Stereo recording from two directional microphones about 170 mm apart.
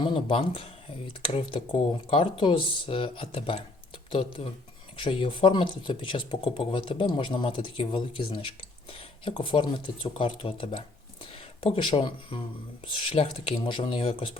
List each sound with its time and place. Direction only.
0.0 s speech: 30° left (ahead or behind)